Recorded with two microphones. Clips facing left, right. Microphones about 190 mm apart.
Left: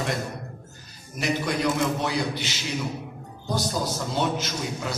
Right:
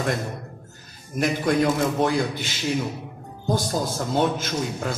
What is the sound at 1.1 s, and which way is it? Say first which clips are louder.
A man's voice: right 5 dB; 50° right (ahead or behind).